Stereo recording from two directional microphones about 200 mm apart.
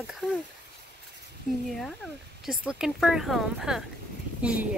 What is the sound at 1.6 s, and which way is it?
Speech, centre (ahead or behind).